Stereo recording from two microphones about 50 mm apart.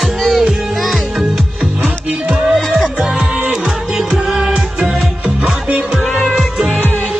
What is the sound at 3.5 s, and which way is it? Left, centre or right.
Music, centre.